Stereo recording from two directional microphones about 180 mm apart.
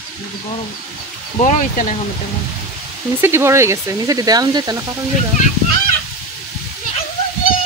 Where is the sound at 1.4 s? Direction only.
45° left (ahead or behind).